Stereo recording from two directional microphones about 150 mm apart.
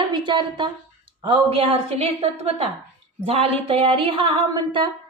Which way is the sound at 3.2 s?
40° right (ahead or behind).